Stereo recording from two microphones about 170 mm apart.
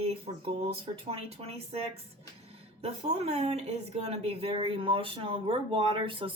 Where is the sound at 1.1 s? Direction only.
35° right (ahead or behind).